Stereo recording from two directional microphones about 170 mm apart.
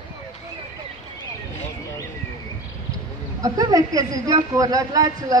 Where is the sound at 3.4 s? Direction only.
20° right (ahead or behind).